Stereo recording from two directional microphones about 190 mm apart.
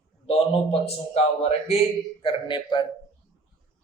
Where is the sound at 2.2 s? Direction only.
25° left (ahead or behind).